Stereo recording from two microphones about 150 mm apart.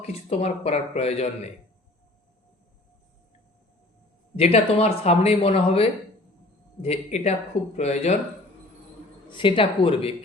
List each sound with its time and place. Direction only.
0.0 s speech: 45° left (ahead or behind)
4.4 s speech: 40° left (ahead or behind)
9.3 s speech: 35° left (ahead or behind)